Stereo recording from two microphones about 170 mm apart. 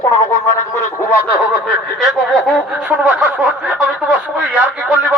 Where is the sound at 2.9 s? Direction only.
10° right (ahead or behind).